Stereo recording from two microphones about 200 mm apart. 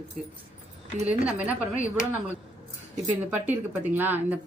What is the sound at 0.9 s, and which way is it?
Speech, 30° right (ahead or behind).